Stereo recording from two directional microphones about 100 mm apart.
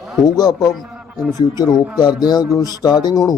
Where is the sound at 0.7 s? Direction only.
Centre (ahead or behind).